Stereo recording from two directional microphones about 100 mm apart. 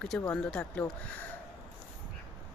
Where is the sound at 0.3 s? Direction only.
10° left (ahead or behind).